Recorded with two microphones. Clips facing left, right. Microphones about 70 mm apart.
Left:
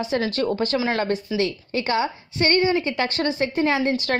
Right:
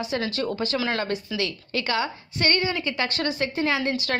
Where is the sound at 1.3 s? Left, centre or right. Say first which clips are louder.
Left 4 dB; left.